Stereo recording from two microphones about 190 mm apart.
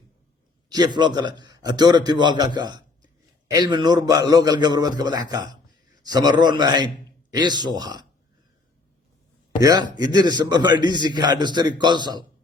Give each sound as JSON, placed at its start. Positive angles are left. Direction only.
{"t": 0.7, "sound": "a man's voice", "side_deg": -20}
{"t": 9.6, "sound": "a man's voice", "side_deg": -20}